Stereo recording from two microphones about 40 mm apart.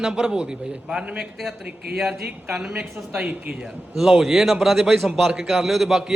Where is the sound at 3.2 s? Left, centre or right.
Right.